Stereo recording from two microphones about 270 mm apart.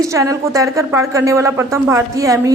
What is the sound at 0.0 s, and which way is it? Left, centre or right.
A woman's voice, centre.